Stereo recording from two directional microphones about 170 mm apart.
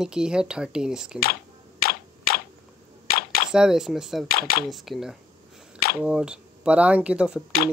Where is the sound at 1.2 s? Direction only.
60° left (ahead or behind).